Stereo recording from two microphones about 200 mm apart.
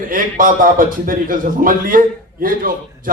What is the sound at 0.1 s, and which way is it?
A man's voice, 45° right (ahead or behind).